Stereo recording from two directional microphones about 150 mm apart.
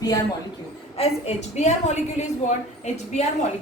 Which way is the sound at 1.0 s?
45° left (ahead or behind).